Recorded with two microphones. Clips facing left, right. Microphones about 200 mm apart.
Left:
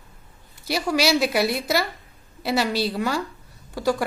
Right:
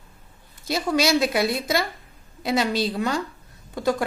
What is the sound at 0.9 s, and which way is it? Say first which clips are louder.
A woman's voice: even; centre (ahead or behind).